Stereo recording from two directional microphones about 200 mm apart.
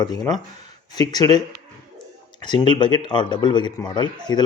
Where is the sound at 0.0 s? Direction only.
20° left (ahead or behind).